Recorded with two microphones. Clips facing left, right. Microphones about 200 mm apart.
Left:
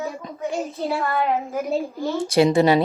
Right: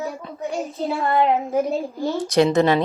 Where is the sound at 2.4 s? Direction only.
10° left (ahead or behind).